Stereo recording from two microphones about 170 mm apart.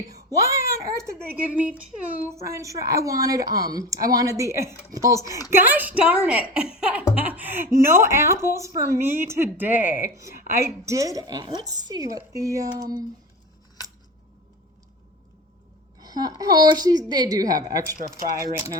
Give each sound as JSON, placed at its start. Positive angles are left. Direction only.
{"t": 0.3, "sound": "speech", "side_deg": -20}
{"t": 16.0, "sound": "speech", "side_deg": -20}